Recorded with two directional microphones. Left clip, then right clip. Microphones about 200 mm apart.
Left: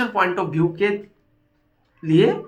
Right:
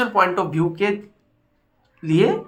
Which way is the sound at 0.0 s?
15° right (ahead or behind).